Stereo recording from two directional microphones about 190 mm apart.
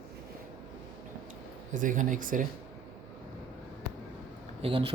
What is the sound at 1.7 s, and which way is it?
Speech, 45° right (ahead or behind).